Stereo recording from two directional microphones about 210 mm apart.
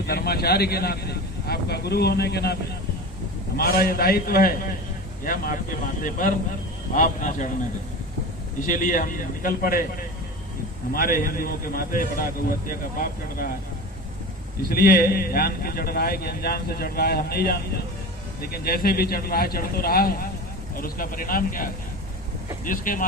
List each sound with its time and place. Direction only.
0.1 s a man's voice: 45° left (ahead or behind)
3.6 s a man's voice: 45° left (ahead or behind)
8.6 s a man's voice: 40° left (ahead or behind)
10.9 s a man's voice: 45° left (ahead or behind)
14.7 s a man's voice: 45° left (ahead or behind)